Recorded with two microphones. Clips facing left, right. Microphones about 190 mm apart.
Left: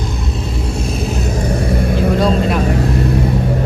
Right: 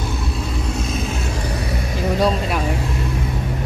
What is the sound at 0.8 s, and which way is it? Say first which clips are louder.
Vehicle: left 4 dB; 35° left (ahead or behind).